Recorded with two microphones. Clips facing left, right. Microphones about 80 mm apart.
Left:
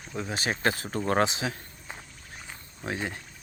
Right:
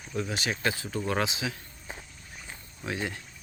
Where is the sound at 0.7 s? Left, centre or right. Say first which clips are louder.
Left 3 dB; left.